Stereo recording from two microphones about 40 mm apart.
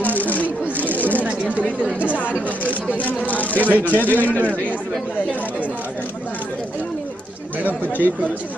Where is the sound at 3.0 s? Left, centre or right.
Left.